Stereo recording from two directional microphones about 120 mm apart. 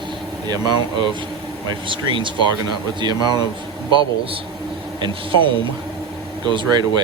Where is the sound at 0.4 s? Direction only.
35° right (ahead or behind).